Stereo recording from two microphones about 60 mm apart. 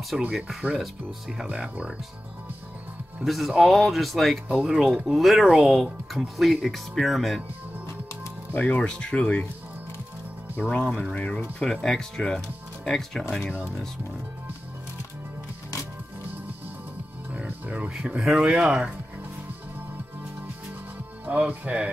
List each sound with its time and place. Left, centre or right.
0.2 s speech: centre
3.3 s speech: centre
8.5 s speech: left
10.7 s speech: centre
17.3 s music: right
17.9 s speech: centre
21.3 s speech: right